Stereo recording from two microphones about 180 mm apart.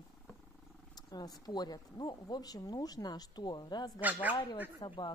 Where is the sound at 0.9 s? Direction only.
20° left (ahead or behind).